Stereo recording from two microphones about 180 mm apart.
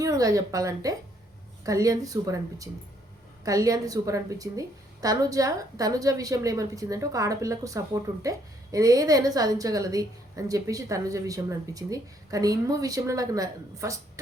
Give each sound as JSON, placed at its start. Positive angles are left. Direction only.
{"t": 0.0, "sound": "a woman's voice", "side_deg": -20}